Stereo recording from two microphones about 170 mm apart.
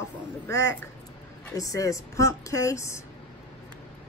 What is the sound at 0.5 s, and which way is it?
A woman's voice, 20° left (ahead or behind).